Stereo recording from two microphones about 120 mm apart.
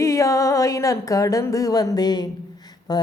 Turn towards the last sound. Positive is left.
turn(degrees=35)  # may be behind; listen again after turning